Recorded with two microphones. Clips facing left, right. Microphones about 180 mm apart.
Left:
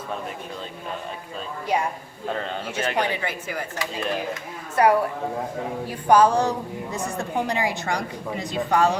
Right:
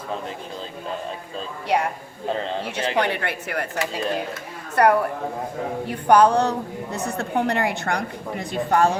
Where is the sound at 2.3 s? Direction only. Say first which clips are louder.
Right 3 dB; 30° right (ahead or behind).